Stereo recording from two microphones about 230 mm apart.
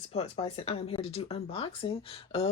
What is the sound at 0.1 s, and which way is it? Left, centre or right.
Speech, left.